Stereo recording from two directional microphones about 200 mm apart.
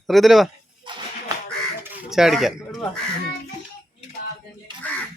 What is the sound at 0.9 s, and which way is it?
Whip, 25° right (ahead or behind).